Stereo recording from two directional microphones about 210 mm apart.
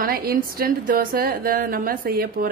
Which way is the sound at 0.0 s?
45° right (ahead or behind).